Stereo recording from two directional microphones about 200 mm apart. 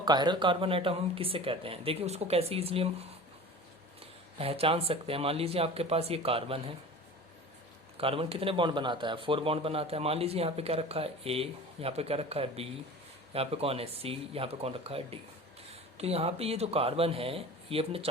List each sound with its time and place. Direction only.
0.0 s a man's voice: 20° right (ahead or behind)
7.9 s a man's voice: 30° right (ahead or behind)